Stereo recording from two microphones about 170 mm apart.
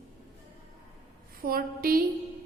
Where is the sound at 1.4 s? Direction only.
60° right (ahead or behind).